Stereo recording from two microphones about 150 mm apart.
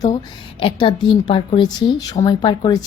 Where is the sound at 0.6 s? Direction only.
35° left (ahead or behind).